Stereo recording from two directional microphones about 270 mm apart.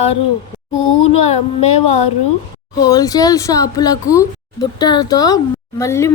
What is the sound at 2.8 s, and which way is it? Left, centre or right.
A woman's voice, centre.